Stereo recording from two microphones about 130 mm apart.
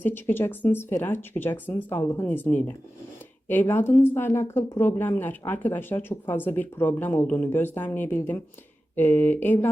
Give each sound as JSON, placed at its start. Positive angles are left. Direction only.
{"t": 0.0, "sound": "speech", "side_deg": 15}